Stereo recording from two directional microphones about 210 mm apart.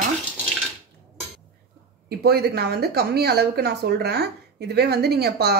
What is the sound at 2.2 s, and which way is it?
Speech, 50° right (ahead or behind).